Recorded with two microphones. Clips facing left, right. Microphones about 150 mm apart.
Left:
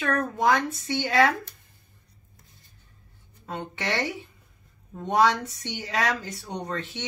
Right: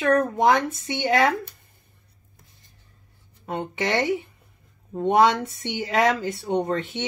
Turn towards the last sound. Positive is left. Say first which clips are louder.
# right 8 dB
turn(degrees=-25)  # may be behind; listen again after turning